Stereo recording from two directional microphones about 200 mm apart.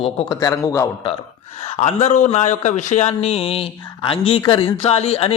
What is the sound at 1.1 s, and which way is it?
A man's voice, 30° left (ahead or behind).